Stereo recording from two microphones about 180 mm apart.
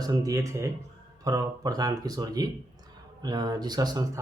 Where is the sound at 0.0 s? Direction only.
20° right (ahead or behind).